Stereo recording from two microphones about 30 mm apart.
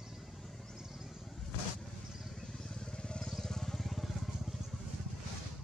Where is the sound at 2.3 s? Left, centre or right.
Centre.